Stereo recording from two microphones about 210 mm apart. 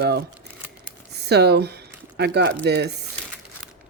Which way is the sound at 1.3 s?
50° right (ahead or behind).